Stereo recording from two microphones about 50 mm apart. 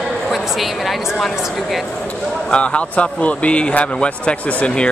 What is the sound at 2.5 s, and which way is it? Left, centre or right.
A man's voice, left.